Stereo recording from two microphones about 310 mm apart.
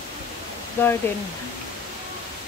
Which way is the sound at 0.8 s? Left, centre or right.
Centre.